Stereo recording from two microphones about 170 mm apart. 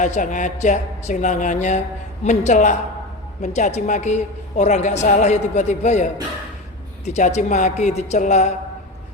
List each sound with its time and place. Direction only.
0.0 s a woman's voice: 45° left (ahead or behind)